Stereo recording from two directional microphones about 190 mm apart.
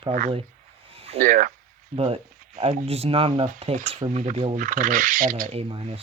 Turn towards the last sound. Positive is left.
turn(degrees=-30)  # may be behind; listen again after turning